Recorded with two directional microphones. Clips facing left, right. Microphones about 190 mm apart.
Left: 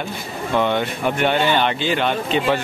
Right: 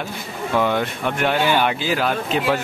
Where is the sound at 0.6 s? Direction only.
Centre (ahead or behind).